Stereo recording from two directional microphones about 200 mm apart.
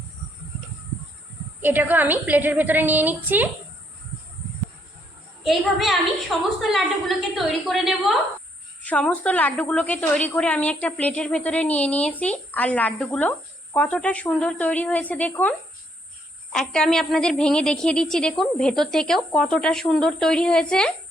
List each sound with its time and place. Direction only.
1.6 s a woman's voice: 10° right (ahead or behind)
5.4 s a child's voice: centre (ahead or behind)